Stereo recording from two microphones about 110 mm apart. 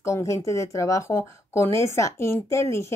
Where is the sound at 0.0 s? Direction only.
25° left (ahead or behind).